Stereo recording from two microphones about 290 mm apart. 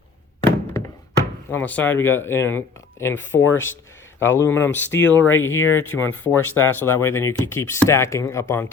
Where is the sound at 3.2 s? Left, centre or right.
Left.